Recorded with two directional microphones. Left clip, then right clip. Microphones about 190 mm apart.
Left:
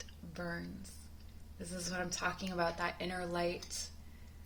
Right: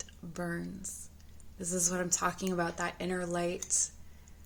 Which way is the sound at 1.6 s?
55° right (ahead or behind).